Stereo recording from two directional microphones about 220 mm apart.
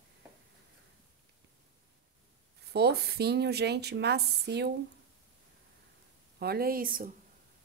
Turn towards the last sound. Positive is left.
turn(degrees=-40)  # may be behind; listen again after turning